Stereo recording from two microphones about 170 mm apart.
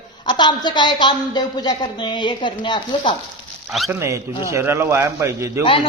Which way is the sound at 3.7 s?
Centre (ahead or behind).